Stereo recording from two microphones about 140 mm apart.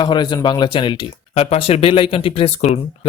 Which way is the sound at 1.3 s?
45° left (ahead or behind).